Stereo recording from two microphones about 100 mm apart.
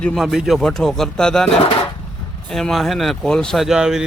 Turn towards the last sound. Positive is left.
turn(degrees=-5)  # may be behind; listen again after turning